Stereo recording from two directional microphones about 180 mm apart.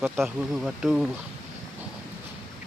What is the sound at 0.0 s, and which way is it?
Speech, centre (ahead or behind).